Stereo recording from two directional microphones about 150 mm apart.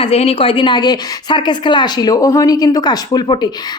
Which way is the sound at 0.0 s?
40° left (ahead or behind).